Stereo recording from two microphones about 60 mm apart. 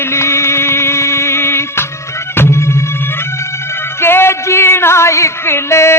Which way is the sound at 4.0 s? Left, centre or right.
Left.